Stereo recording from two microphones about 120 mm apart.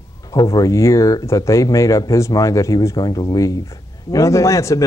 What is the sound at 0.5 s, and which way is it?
Speech, 25° left (ahead or behind).